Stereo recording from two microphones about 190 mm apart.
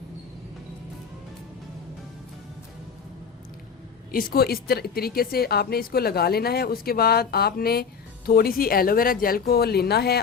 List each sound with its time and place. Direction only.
4.1 s a woman's voice: 50° left (ahead or behind)